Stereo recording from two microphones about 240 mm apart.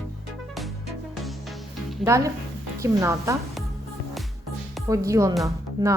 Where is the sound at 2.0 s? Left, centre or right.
Centre.